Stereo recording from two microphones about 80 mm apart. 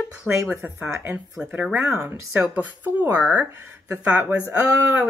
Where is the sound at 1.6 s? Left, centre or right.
Centre.